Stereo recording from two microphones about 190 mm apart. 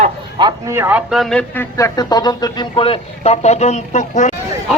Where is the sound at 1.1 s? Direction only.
Centre (ahead or behind); by 4.3 s 40° left (ahead or behind).